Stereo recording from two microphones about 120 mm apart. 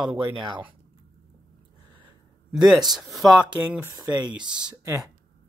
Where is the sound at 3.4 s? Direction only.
10° right (ahead or behind).